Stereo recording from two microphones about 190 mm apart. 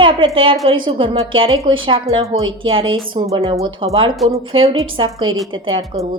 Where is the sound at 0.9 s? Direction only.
30° right (ahead or behind).